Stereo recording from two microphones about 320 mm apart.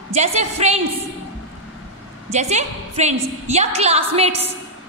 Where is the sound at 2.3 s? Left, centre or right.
Right.